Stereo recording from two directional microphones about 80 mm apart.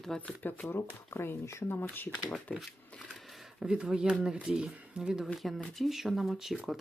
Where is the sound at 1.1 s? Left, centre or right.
Left.